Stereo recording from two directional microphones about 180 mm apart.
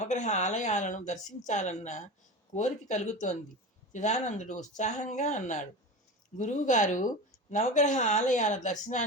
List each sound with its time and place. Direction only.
0.0 s speech: 40° left (ahead or behind)